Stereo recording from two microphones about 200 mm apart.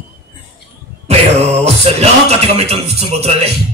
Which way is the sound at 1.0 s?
30° right (ahead or behind).